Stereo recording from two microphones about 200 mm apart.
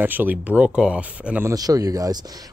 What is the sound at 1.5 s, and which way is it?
Speech, 20° right (ahead or behind).